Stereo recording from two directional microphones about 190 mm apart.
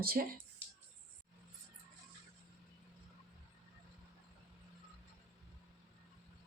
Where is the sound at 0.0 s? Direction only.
50° right (ahead or behind).